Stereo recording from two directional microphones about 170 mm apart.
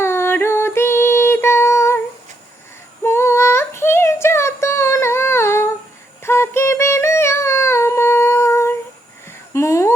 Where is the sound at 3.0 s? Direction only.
15° left (ahead or behind).